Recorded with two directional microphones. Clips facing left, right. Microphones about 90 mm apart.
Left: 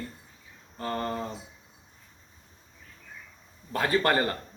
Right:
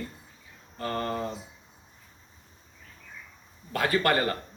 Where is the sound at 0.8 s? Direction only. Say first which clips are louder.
Even; 25° left (ahead or behind).